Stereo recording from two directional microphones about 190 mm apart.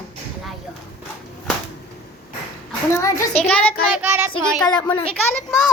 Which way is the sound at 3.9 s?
10° right (ahead or behind).